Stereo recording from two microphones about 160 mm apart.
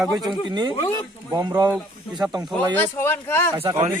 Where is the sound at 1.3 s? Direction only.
25° right (ahead or behind).